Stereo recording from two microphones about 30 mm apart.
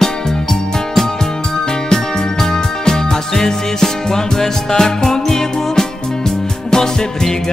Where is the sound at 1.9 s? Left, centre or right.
Centre.